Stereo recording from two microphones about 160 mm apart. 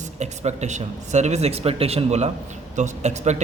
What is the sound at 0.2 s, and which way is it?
A man's voice, 45° right (ahead or behind).